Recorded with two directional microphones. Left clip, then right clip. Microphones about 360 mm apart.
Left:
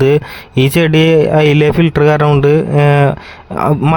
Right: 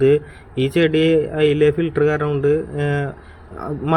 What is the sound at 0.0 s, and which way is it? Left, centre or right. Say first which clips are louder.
Speech: left 4 dB; left.